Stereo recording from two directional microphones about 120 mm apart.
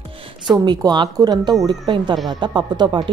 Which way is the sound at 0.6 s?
35° right (ahead or behind).